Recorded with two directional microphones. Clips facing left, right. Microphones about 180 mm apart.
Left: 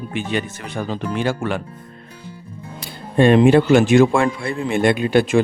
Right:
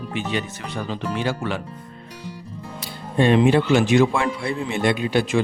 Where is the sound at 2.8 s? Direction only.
55° left (ahead or behind).